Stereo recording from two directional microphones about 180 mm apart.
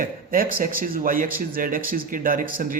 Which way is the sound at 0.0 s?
50° right (ahead or behind).